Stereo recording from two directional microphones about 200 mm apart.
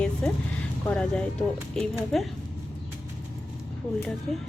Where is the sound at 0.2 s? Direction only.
5° left (ahead or behind).